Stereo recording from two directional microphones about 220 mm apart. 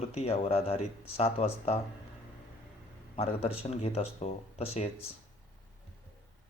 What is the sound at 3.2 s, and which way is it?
Speech, 25° left (ahead or behind).